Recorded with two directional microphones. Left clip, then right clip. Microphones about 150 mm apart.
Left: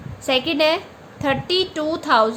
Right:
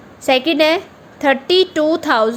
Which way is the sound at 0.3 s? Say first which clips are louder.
Right 5 dB; 40° right (ahead or behind).